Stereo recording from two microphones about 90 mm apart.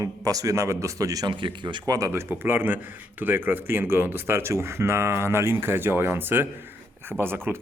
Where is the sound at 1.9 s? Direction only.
35° right (ahead or behind).